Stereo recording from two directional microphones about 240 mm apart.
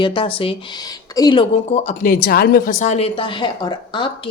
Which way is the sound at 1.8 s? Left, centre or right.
Left.